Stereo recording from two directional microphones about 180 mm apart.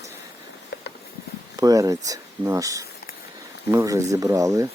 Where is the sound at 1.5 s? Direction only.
20° right (ahead or behind).